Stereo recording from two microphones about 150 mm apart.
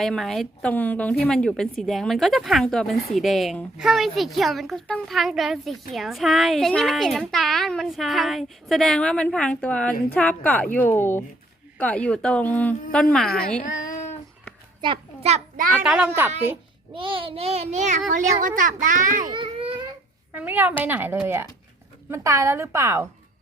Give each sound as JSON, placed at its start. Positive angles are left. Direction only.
{"t": 0.0, "sound": "a woman's voice", "side_deg": 0}
{"t": 14.8, "sound": "a sound", "side_deg": -35}
{"t": 15.8, "sound": "a woman's voice", "side_deg": -5}
{"t": 16.9, "sound": "a child's voice", "side_deg": -35}
{"t": 19.3, "sound": "a sound", "side_deg": -35}
{"t": 20.3, "sound": "a woman's voice", "side_deg": -10}